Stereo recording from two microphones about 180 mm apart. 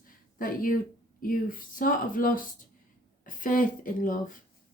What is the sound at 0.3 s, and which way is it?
Speech, 50° left (ahead or behind).